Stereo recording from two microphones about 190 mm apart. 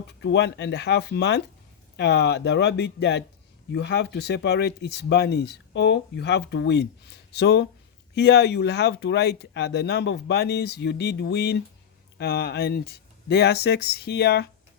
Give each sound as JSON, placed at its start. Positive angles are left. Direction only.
{"t": 0.2, "sound": "speech", "side_deg": 65}